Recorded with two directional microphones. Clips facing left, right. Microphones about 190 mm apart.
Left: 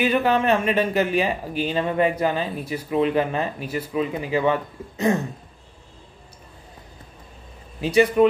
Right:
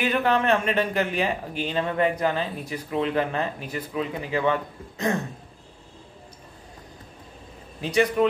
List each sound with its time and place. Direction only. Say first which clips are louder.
0.0 s speech: left 3 dB; 10° left (ahead or behind)
7.8 s speech: left 5 dB; 10° left (ahead or behind)